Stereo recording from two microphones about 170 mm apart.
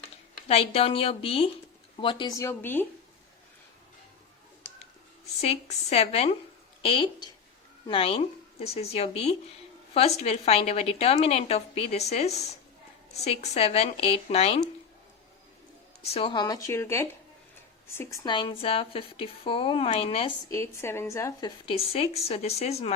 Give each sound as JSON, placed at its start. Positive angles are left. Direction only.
{"t": 0.4, "sound": "a woman's voice", "side_deg": 35}
{"t": 5.4, "sound": "a woman's voice", "side_deg": 40}
{"t": 16.0, "sound": "a woman's voice", "side_deg": 35}
{"t": 20.5, "sound": "a woman's voice", "side_deg": 15}
{"t": 21.7, "sound": "a woman's voice", "side_deg": 35}